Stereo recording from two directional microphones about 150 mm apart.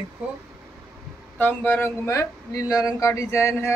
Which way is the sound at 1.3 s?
10° left (ahead or behind).